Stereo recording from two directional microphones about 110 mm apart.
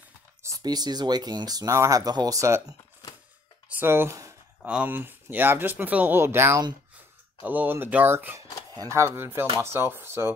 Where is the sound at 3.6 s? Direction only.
20° right (ahead or behind).